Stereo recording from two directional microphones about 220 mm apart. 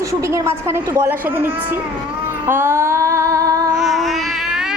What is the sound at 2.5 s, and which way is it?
Female singing, 10° right (ahead or behind).